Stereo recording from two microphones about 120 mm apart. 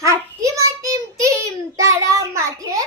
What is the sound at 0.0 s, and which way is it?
Child singing, 25° right (ahead or behind).